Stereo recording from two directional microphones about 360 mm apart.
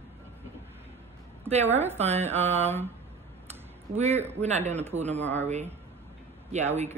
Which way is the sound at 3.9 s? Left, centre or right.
Centre.